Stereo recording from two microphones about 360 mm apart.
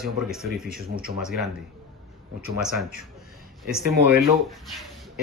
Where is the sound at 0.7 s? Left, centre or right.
Right.